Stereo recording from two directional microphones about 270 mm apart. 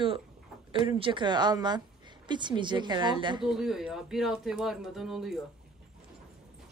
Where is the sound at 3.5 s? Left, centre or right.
Centre.